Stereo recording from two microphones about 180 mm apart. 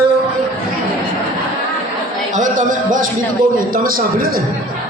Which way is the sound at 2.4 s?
45° right (ahead or behind).